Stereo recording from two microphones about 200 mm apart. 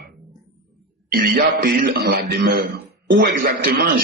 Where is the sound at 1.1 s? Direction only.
50° right (ahead or behind).